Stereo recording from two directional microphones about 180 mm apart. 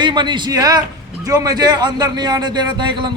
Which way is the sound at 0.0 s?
25° right (ahead or behind).